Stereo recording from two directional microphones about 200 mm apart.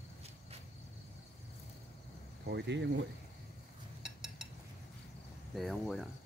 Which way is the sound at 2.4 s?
60° right (ahead or behind).